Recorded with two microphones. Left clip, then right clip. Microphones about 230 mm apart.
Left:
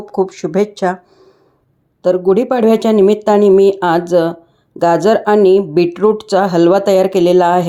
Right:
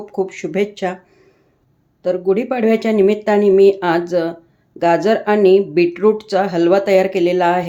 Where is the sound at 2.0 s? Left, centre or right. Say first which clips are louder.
Left 5 dB; left.